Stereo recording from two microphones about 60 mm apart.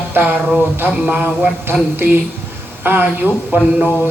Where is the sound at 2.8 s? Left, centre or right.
Right.